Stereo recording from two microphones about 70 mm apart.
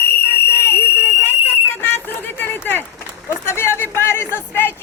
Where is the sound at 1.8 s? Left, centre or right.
Left.